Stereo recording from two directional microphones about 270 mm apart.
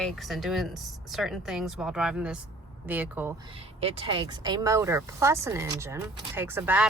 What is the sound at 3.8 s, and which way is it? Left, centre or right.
Speech, right.